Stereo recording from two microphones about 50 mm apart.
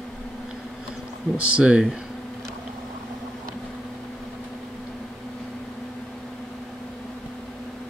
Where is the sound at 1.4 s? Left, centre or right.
Right.